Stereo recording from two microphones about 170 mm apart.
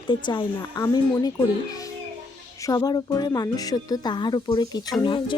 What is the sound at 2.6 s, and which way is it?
Speech, 25° left (ahead or behind).